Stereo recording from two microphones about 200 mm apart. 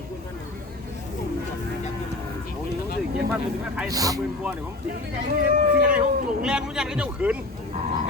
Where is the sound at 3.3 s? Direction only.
5° right (ahead or behind).